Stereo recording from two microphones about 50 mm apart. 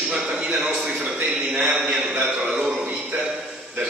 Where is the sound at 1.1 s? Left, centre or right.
Right.